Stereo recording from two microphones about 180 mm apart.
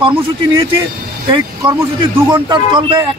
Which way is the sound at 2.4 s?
25° right (ahead or behind).